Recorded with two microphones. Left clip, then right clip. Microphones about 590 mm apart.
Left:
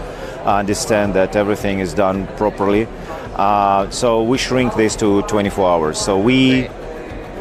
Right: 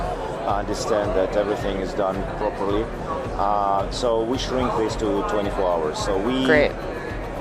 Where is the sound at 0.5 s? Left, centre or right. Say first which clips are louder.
Left 7 dB; left.